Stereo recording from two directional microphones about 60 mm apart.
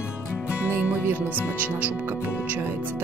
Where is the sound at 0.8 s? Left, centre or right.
Right.